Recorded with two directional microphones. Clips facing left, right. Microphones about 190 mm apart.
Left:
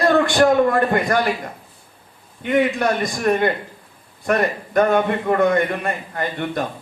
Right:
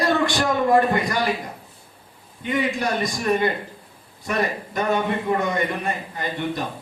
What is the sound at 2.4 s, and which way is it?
A man's voice, 55° left (ahead or behind).